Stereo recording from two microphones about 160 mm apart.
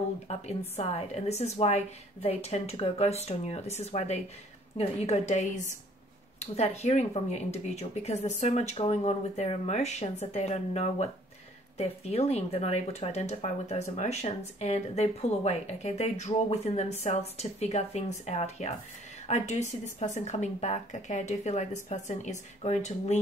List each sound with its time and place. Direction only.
0.3 s a woman's voice: 40° left (ahead or behind)